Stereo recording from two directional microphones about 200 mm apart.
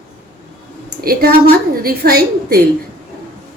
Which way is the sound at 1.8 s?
50° right (ahead or behind).